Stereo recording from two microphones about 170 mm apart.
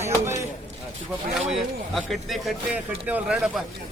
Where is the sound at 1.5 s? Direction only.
Centre (ahead or behind).